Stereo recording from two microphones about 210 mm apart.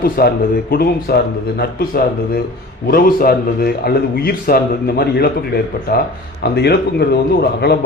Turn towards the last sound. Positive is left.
turn(degrees=50)  # may be behind; listen again after turning